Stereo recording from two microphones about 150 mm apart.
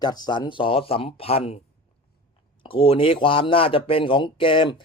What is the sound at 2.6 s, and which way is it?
Speech, 35° left (ahead or behind).